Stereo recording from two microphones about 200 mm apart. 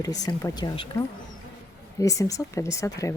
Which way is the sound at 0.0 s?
20° left (ahead or behind).